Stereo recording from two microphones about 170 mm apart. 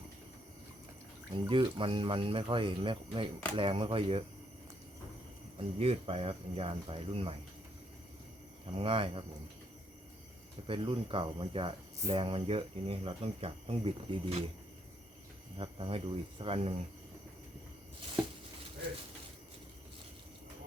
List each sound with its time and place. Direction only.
1.3 s speech: 30° right (ahead or behind)
5.5 s speech: 35° right (ahead or behind)
8.7 s speech: 35° right (ahead or behind)
10.7 s speech: 30° right (ahead or behind)
15.5 s speech: 30° right (ahead or behind)